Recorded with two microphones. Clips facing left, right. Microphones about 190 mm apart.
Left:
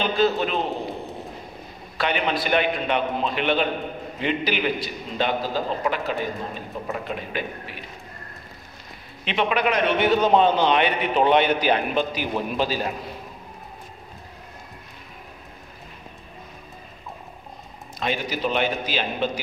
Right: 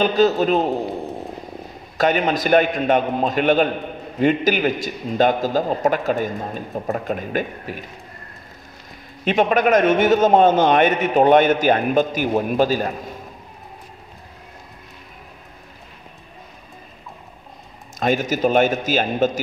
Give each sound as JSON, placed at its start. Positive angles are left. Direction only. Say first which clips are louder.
{"t": 0.0, "sound": "a man's voice", "louder": "right 5 dB", "side_deg": -40}
{"t": 2.0, "sound": "a man's voice", "louder": "right 6 dB", "side_deg": -45}
{"t": 9.2, "sound": "a man's voice", "louder": "right 6 dB", "side_deg": -45}
{"t": 17.9, "sound": "a man's voice", "louder": "right 7 dB", "side_deg": -45}